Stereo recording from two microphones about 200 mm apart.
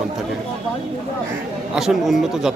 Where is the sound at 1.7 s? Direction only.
Centre (ahead or behind).